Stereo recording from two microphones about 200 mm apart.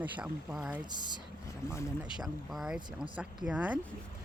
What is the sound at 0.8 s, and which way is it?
Speech, 20° right (ahead or behind).